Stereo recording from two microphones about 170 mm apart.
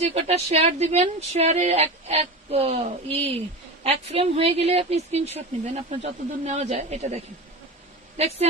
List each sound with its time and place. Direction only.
0.0 s a woman's voice: 40° right (ahead or behind)